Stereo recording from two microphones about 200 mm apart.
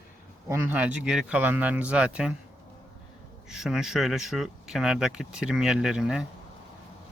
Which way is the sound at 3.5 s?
Centre (ahead or behind).